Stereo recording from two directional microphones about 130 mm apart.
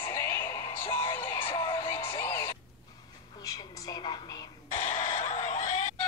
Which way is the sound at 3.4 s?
25° left (ahead or behind).